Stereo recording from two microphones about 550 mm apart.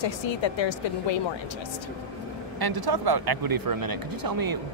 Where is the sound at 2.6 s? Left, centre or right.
Right.